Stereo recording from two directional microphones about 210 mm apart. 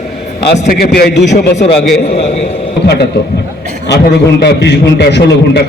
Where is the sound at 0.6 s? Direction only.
45° left (ahead or behind).